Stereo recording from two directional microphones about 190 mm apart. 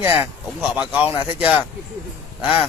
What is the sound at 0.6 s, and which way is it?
Speech, 5° right (ahead or behind).